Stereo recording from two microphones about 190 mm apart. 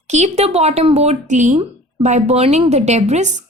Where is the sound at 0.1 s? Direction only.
35° right (ahead or behind).